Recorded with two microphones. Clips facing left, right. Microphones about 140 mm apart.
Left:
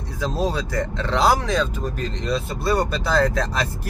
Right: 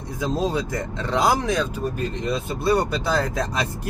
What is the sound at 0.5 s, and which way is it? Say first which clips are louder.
Speech: left 1 dB; 20° right (ahead or behind).